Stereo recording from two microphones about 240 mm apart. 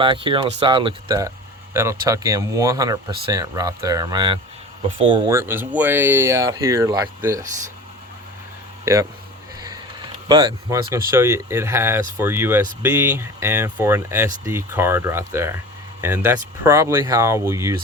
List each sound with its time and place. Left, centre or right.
0.0 s speech: centre
8.8 s speech: centre
9.6 s sniff: centre
10.2 s speech: centre